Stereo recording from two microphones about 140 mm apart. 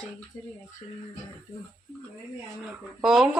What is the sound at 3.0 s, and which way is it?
Speech, centre (ahead or behind).